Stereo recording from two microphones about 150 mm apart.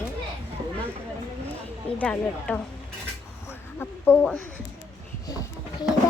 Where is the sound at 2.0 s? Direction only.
5° left (ahead or behind).